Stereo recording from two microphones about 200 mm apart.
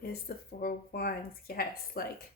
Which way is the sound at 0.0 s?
50° left (ahead or behind).